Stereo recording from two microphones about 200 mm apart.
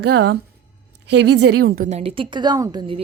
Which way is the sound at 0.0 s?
55° right (ahead or behind).